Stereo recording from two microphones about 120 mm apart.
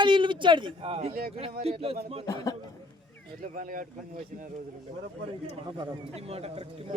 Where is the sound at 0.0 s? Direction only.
40° right (ahead or behind).